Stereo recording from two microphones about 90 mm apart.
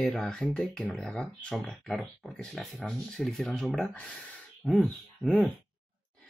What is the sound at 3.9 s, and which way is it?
Speech, 15° left (ahead or behind).